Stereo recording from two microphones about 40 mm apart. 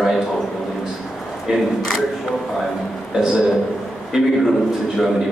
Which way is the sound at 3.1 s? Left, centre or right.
Centre.